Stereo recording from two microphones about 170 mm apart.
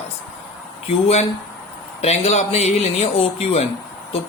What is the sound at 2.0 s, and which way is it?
Speech, 40° left (ahead or behind).